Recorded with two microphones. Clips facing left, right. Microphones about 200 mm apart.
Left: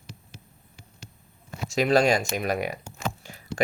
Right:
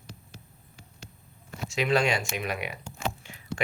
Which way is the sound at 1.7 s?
40° left (ahead or behind).